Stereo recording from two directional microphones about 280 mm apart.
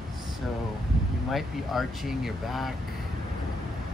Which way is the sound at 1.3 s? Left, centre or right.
Centre.